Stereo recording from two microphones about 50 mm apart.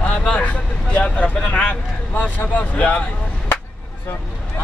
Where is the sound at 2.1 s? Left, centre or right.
Left.